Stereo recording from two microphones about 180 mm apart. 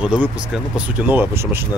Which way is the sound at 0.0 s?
5° right (ahead or behind).